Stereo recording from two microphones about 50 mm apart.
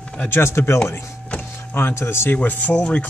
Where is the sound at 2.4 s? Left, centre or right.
Left.